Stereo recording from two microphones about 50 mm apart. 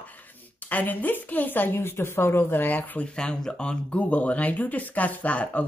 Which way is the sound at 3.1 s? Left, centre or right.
Centre.